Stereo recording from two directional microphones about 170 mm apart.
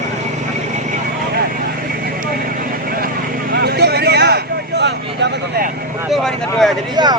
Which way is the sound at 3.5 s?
70° right (ahead or behind).